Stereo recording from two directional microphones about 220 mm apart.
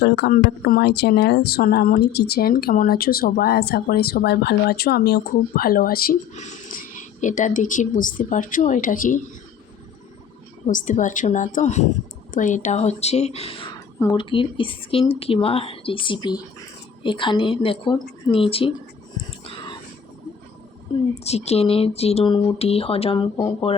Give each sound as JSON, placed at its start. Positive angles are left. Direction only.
{"t": 0.0, "sound": "speech", "side_deg": 45}
{"t": 10.7, "sound": "a woman's voice", "side_deg": 35}
{"t": 19.1, "sound": "whispering", "side_deg": 20}
{"t": 20.9, "sound": "a woman's voice", "side_deg": 20}